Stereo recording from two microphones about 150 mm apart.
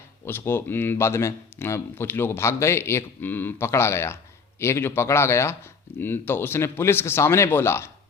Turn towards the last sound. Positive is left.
turn(degrees=15)  # may be behind; listen again after turning